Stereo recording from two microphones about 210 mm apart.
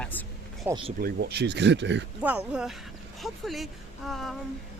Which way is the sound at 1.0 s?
50° right (ahead or behind).